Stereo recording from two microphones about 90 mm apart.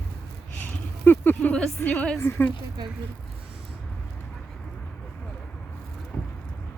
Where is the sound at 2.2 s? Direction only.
25° left (ahead or behind).